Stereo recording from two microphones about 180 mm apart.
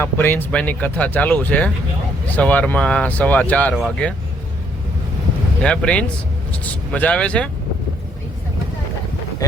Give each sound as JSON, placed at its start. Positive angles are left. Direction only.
{"t": 0.0, "sound": "speech", "side_deg": 10}
{"t": 5.6, "sound": "speech", "side_deg": 5}
{"t": 9.4, "sound": "speech", "side_deg": 20}